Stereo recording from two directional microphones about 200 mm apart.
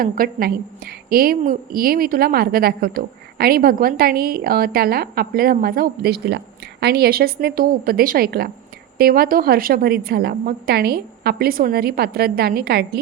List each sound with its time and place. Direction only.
0.0 s a woman's voice: 45° right (ahead or behind)